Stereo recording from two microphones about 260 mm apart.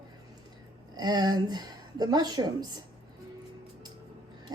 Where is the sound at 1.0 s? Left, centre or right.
Centre.